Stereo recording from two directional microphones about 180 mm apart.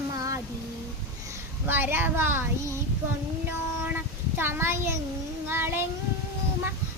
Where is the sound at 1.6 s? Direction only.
10° right (ahead or behind).